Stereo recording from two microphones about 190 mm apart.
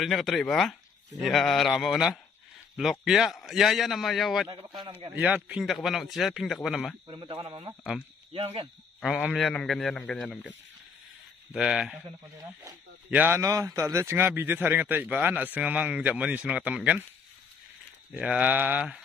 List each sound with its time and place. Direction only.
0.0 s speech: centre (ahead or behind)
4.5 s speech: 20° right (ahead or behind)
5.1 s speech: 5° right (ahead or behind)
7.1 s speech: 25° right (ahead or behind)
9.0 s speech: centre (ahead or behind)
11.5 s speech: 5° right (ahead or behind)
13.1 s a man's voice: 10° right (ahead or behind)
18.1 s a man's voice: 5° right (ahead or behind)